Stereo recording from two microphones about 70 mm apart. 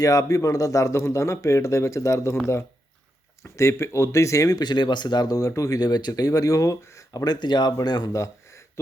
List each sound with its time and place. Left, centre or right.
0.0 s speech: left
3.4 s speech: left
4.6 s speech: left
5.5 s speech: left
7.3 s speech: left
8.1 s a sound: left